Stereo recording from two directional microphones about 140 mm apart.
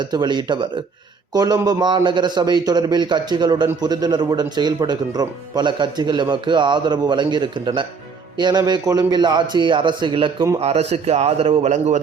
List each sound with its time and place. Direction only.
0.0 s a man's voice: 30° right (ahead or behind)
10.6 s speech: 45° right (ahead or behind)